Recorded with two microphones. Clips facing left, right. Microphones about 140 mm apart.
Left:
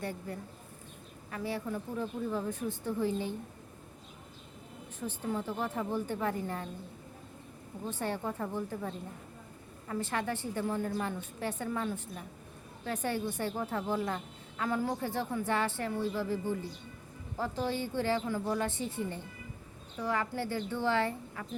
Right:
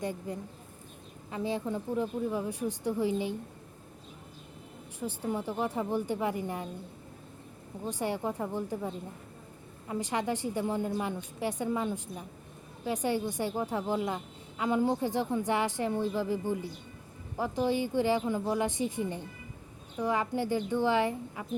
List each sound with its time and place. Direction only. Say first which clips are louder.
0.0 s a woman's voice: right 3 dB; 15° right (ahead or behind)
4.9 s a woman's voice: right 2 dB; 10° right (ahead or behind)
7.9 s a woman's voice: right 3 dB; 15° right (ahead or behind)